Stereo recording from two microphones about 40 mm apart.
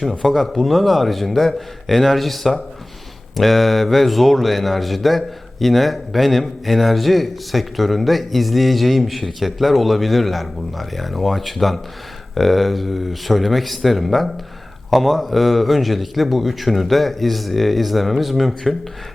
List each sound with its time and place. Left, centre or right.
0.0 s speech: centre